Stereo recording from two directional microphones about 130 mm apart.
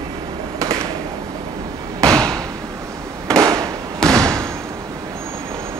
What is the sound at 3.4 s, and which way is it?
Fireworks, 30° right (ahead or behind).